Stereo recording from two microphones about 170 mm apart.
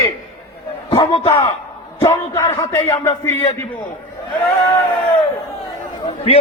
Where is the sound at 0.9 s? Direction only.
25° left (ahead or behind).